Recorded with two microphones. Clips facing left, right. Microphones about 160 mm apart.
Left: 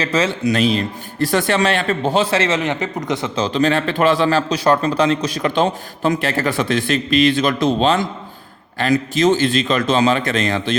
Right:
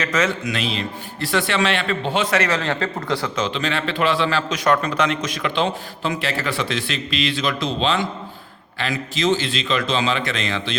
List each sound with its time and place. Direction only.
0.0 s a man's voice: 30° left (ahead or behind)
3.4 s a man's voice: 40° left (ahead or behind)